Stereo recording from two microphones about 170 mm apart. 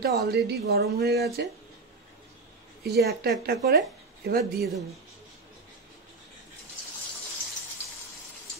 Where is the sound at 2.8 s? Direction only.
70° right (ahead or behind).